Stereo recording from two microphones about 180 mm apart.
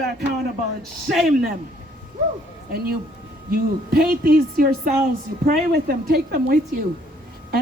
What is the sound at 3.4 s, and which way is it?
A woman's voice, 60° right (ahead or behind).